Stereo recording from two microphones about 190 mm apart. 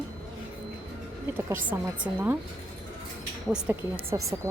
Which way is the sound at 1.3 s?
10° right (ahead or behind).